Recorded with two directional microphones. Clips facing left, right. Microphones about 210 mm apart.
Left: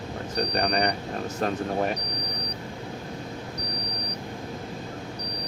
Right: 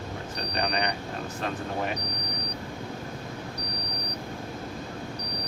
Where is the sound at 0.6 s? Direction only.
35° left (ahead or behind).